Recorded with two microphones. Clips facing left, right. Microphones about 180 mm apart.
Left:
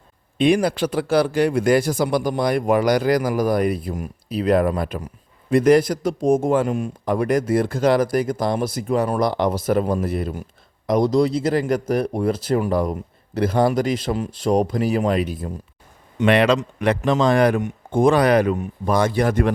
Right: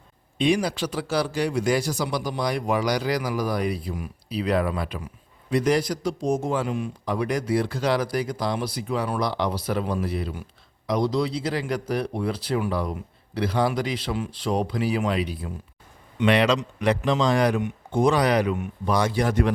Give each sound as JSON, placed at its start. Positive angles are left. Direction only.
{"t": 0.3, "sound": "a man's voice", "side_deg": 55}